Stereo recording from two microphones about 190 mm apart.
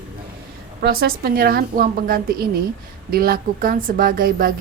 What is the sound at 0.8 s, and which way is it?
A woman's voice, 55° right (ahead or behind).